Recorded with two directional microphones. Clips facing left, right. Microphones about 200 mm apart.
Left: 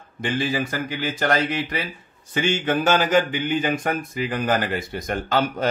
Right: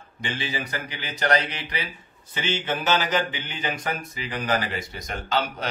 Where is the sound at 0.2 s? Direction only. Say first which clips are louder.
Left 7 dB; 50° left (ahead or behind).